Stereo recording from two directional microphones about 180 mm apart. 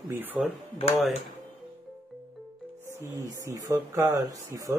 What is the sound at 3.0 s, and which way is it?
Speech, 15° right (ahead or behind).